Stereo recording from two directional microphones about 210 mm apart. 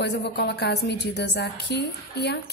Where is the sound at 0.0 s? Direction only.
50° left (ahead or behind).